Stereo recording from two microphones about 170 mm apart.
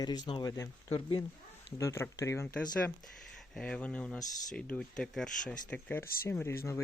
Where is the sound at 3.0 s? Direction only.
Centre (ahead or behind).